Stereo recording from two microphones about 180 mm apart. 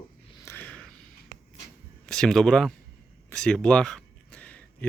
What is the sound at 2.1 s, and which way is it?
Speech, centre (ahead or behind).